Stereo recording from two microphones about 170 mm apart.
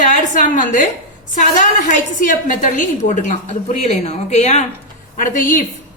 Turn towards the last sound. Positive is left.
turn(degrees=50)  # may be behind; listen again after turning